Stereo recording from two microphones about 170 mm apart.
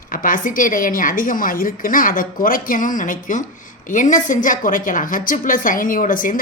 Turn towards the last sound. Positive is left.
turn(degrees=55)  # may be behind; listen again after turning